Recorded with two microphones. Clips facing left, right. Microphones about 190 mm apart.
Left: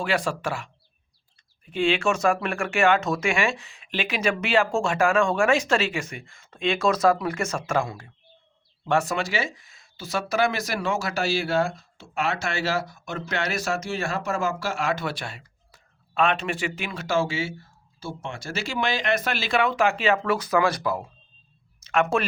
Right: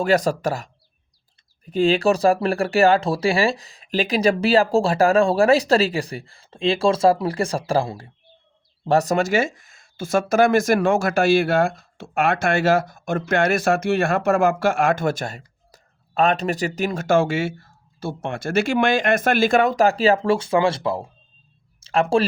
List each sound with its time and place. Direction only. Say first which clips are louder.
0.0 s speech: right 7 dB; 40° right (ahead or behind)